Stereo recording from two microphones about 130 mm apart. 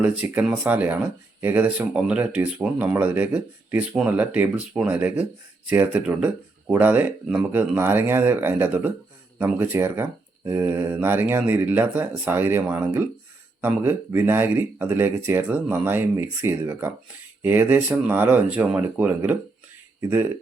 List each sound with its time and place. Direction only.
0.0 s speech: 10° right (ahead or behind)